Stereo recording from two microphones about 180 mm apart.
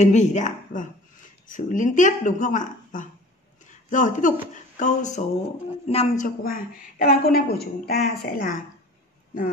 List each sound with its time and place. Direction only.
0.0 s a woman's voice: 40° left (ahead or behind)
6.2 s a woman's voice: 50° left (ahead or behind)